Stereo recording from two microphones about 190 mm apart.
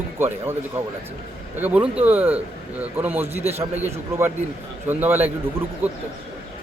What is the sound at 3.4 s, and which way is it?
Speech, 35° right (ahead or behind).